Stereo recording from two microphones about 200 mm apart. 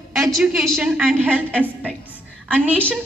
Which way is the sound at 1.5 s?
5° left (ahead or behind).